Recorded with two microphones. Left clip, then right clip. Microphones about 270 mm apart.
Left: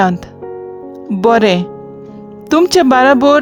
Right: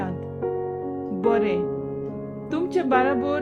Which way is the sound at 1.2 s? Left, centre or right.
Left.